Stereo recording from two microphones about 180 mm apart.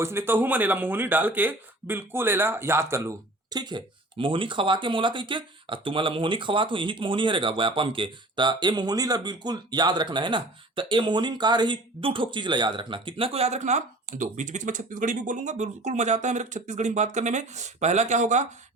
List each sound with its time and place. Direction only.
0.0 s speech: 15° right (ahead or behind); by 18.4 s 40° right (ahead or behind)